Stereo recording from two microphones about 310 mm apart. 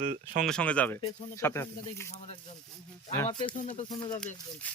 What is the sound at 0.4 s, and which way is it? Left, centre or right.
Speech, centre.